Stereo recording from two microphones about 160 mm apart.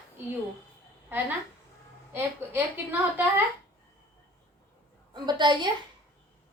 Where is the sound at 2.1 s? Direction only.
10° right (ahead or behind).